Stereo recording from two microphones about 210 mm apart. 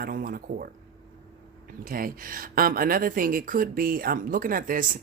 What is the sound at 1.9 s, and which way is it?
Speech, 40° right (ahead or behind).